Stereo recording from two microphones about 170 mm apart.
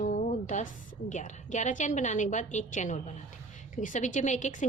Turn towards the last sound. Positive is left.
turn(degrees=45)  # may be behind; listen again after turning